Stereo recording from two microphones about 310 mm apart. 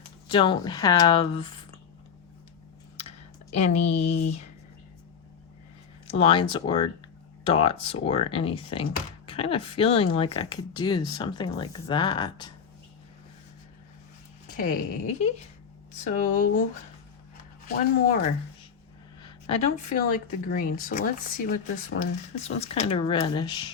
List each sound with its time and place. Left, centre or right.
0.3 s speech: centre
3.0 s speech: left
6.1 s speech: centre
14.5 s speech: left
17.7 s speech: left
19.2 s a woman's voice: centre